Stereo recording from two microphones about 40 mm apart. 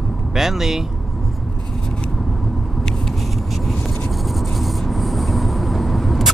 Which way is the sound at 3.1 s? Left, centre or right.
Centre.